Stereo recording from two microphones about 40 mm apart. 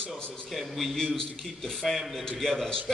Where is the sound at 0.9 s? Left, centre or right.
Centre.